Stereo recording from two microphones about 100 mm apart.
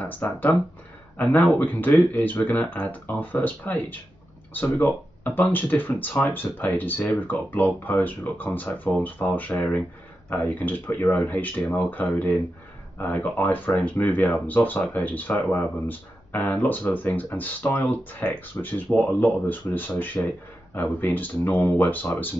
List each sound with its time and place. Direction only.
0.0 s speech: 20° left (ahead or behind)